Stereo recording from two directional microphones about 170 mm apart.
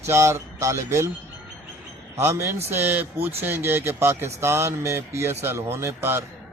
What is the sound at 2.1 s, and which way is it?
Speech, 15° right (ahead or behind).